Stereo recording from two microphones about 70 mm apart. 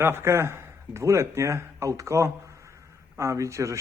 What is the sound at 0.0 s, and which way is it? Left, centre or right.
Speech, right.